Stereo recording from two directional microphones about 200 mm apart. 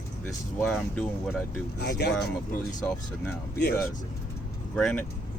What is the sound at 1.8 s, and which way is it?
Speech, 55° left (ahead or behind).